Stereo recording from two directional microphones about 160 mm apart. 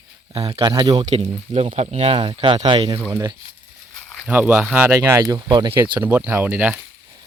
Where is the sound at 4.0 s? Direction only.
10° left (ahead or behind).